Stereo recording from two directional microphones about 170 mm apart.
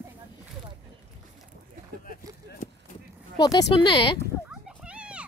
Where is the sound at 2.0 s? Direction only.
55° left (ahead or behind).